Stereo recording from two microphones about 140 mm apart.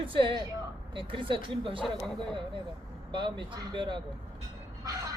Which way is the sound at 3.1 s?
35° right (ahead or behind).